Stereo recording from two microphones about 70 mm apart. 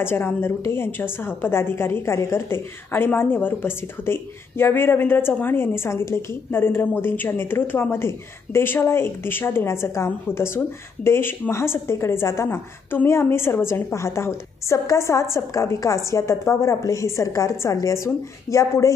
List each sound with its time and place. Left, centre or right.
0.0 s a woman's voice: left